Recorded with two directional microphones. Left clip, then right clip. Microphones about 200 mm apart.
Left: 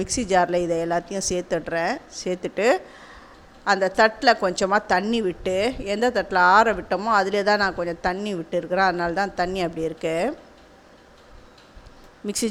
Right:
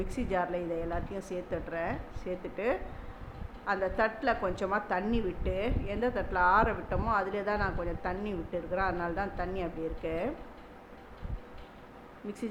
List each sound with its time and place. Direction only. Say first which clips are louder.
0.0 s a woman's voice: left 12 dB; 45° left (ahead or behind)